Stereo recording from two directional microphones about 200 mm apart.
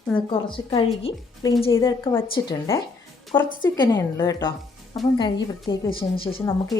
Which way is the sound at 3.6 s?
20° left (ahead or behind).